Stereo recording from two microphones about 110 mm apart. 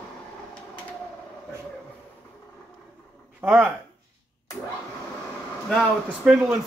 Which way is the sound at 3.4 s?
15° right (ahead or behind).